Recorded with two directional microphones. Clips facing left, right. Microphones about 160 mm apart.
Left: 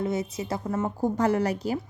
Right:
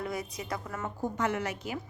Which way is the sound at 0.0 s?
25° left (ahead or behind).